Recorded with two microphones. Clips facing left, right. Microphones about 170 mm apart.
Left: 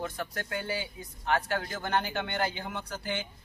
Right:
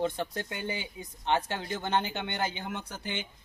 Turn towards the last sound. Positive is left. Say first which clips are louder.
# left 2 dB
turn(degrees=-20)  # may be behind; listen again after turning